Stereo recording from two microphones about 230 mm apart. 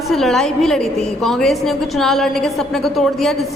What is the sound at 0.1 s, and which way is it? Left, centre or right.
A woman's voice, centre.